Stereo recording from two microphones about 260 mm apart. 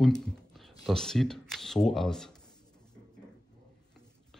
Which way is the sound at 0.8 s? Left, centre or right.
Centre.